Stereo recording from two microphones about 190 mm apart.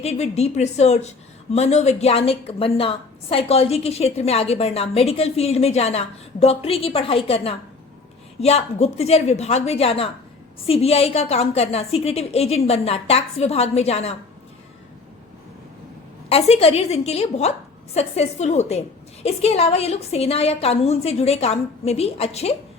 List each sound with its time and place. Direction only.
0.0 s a woman's voice: 35° left (ahead or behind)
16.3 s a woman's voice: 30° left (ahead or behind)